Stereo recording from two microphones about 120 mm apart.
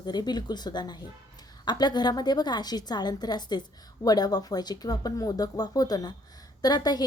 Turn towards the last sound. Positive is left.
turn(degrees=35)  # may be behind; listen again after turning